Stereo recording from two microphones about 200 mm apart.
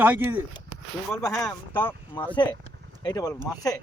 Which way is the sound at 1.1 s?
15° left (ahead or behind).